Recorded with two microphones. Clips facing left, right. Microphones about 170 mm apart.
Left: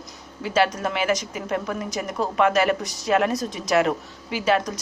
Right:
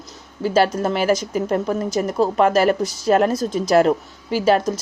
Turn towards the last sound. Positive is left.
turn(degrees=-35)  # may be behind; listen again after turning